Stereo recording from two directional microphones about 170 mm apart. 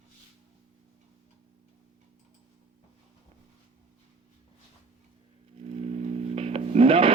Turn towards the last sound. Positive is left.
turn(degrees=-30)  # may be behind; listen again after turning